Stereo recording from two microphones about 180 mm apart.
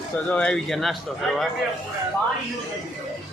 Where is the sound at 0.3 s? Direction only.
5° left (ahead or behind).